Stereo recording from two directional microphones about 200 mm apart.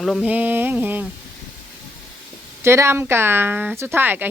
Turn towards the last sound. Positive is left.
turn(degrees=-10)  # may be behind; listen again after turning